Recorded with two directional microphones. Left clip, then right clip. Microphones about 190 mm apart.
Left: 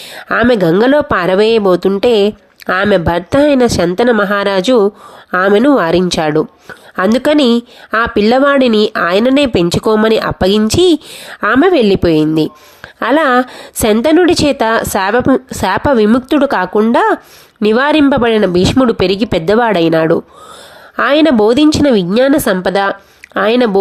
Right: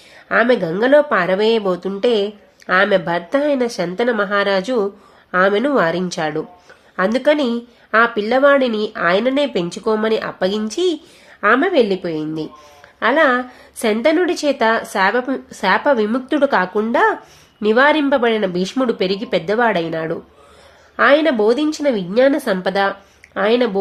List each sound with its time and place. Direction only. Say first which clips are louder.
0.3 s speech: left 5 dB; 45° left (ahead or behind)